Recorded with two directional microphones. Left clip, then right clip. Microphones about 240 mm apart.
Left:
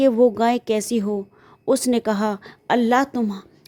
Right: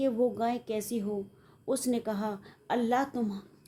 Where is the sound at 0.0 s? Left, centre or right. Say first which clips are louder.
Left 12 dB; left.